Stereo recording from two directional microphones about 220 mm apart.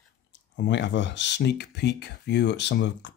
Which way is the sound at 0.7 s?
55° left (ahead or behind).